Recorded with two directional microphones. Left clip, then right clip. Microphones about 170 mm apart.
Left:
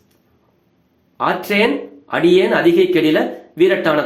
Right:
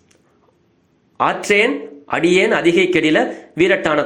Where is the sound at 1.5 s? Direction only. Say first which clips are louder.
Right 1 dB; 20° right (ahead or behind).